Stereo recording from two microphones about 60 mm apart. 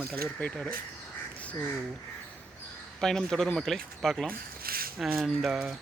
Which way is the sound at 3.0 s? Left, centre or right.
Centre.